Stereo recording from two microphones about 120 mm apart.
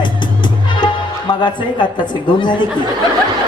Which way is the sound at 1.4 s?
40° left (ahead or behind).